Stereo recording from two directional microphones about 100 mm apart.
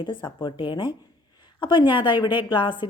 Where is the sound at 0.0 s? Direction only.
55° left (ahead or behind).